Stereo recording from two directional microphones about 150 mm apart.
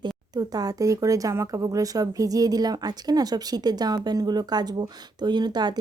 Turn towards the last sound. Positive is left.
turn(degrees=-30)  # may be behind; listen again after turning